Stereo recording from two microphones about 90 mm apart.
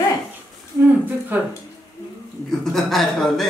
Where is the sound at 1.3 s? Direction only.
20° right (ahead or behind).